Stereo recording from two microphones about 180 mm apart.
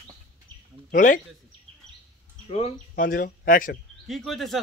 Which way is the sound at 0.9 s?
45° left (ahead or behind).